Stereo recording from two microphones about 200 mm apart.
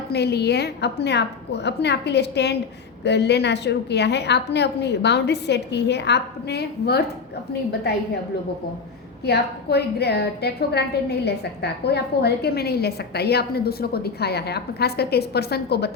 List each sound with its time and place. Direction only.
0.1 s a woman's voice: 55° left (ahead or behind)
9.2 s a woman's voice: 55° left (ahead or behind)